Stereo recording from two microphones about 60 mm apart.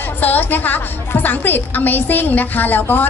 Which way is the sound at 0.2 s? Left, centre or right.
Left.